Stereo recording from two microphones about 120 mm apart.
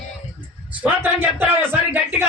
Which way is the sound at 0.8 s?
15° right (ahead or behind).